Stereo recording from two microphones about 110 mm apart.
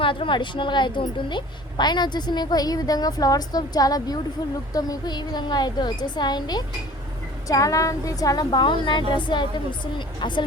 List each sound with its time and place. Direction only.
0.0 s a woman's voice: 50° left (ahead or behind)